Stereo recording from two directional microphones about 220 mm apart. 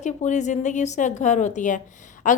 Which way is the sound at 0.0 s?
30° left (ahead or behind).